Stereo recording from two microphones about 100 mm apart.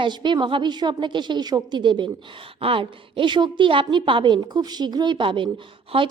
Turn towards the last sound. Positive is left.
turn(degrees=-65)  # may be behind; listen again after turning